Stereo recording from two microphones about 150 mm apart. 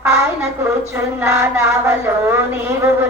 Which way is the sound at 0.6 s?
15° right (ahead or behind).